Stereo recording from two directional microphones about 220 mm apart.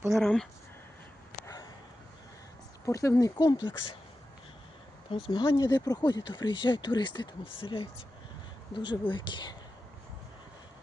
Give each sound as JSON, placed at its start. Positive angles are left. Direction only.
{"t": 0.1, "sound": "speech", "side_deg": 5}
{"t": 2.8, "sound": "speech", "side_deg": 15}
{"t": 5.1, "sound": "speech", "side_deg": 20}